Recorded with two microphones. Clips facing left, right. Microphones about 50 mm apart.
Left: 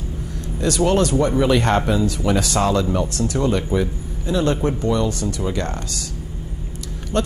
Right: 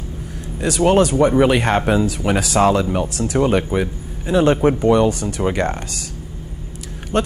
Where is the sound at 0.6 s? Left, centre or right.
Centre.